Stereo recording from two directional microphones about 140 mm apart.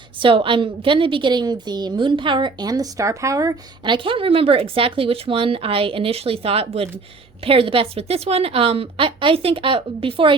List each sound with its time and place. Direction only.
0.2 s a woman's voice: 40° right (ahead or behind)